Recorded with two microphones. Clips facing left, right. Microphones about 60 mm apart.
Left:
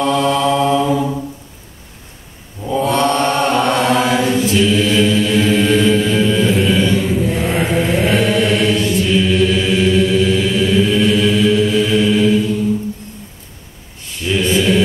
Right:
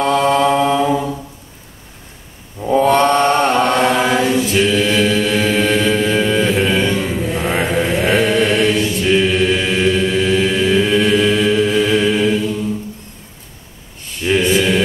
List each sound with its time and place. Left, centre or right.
0.0 s mantra: right
2.6 s mantra: right
5.0 s chant: right
7.4 s mantra: right
8.1 s mantra: centre
9.0 s chant: right
14.2 s mantra: right